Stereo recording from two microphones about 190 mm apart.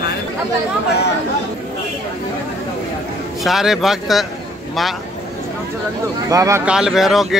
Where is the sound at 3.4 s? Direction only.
Centre (ahead or behind).